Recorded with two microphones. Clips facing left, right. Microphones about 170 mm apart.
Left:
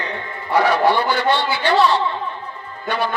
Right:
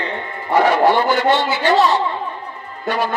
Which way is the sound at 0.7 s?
45° right (ahead or behind).